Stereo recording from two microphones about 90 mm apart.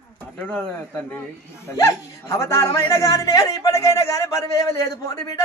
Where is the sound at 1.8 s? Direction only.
30° left (ahead or behind).